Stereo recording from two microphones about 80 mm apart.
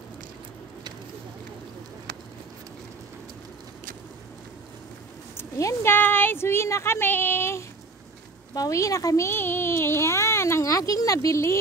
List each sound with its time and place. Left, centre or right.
5.4 s speech: left
8.5 s speech: left
9.3 s speech: left